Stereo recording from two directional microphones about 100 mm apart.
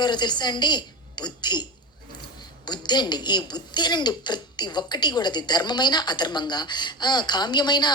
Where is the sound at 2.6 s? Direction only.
45° left (ahead or behind).